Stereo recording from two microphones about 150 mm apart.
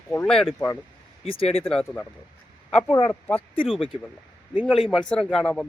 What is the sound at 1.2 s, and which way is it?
Speech, 40° left (ahead or behind).